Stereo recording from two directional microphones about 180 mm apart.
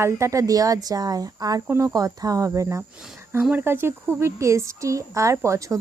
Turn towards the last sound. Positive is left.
turn(degrees=-15)  # may be behind; listen again after turning